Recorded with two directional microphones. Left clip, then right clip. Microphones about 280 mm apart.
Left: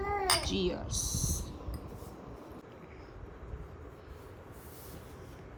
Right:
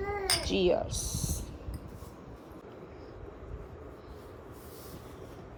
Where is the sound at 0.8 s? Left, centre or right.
Centre.